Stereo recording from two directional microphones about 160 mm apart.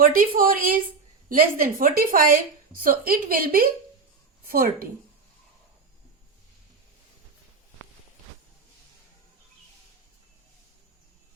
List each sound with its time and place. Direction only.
0.0 s a woman's voice: 60° right (ahead or behind)